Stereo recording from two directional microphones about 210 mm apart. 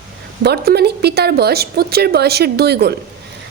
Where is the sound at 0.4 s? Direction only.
50° right (ahead or behind).